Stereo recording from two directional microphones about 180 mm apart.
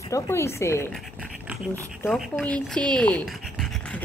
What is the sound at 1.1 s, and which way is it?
Pant, 5° right (ahead or behind).